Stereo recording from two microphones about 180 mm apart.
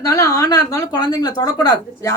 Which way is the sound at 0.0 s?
20° left (ahead or behind).